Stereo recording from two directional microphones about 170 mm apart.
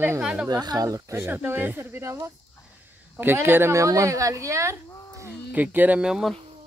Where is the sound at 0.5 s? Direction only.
25° right (ahead or behind).